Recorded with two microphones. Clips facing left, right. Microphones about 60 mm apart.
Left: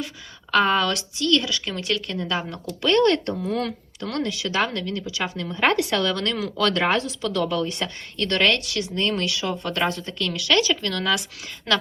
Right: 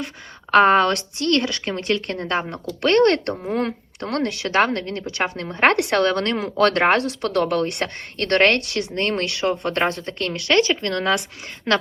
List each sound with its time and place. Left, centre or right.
0.5 s speech: right
2.0 s speech: right
11.7 s a woman's voice: right